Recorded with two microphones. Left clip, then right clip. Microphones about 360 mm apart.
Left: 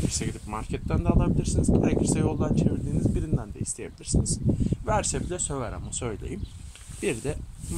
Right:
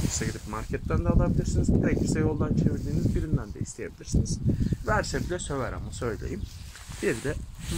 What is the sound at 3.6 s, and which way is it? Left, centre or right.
Speech, centre.